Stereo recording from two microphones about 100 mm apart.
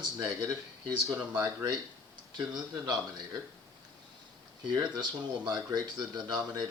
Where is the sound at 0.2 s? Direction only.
30° right (ahead or behind).